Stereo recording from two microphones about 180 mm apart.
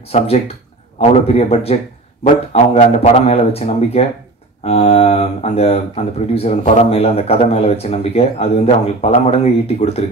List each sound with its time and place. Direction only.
0.9 s speech: 35° left (ahead or behind)